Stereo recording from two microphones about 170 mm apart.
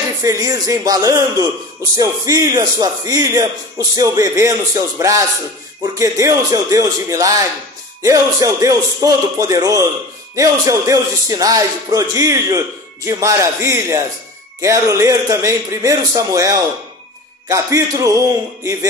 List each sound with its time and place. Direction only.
0.2 s a man's voice: 20° right (ahead or behind)